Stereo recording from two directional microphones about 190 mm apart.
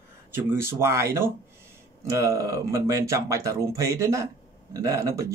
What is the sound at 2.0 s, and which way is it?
Speech, 15° right (ahead or behind).